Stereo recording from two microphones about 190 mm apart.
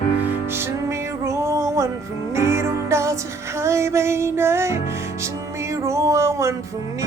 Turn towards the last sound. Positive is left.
turn(degrees=-15)  # may be behind; listen again after turning